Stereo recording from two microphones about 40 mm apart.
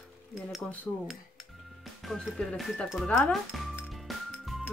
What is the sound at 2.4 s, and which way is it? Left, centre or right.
Speech, left.